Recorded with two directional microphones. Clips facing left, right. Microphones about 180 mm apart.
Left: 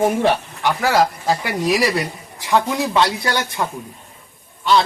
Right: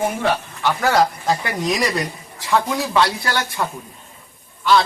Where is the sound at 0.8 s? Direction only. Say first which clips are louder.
Even; centre (ahead or behind).